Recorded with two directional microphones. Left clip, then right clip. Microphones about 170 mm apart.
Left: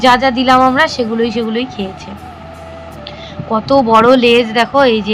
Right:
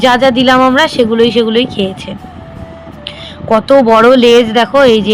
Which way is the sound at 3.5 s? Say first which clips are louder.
Right 4 dB; 30° right (ahead or behind).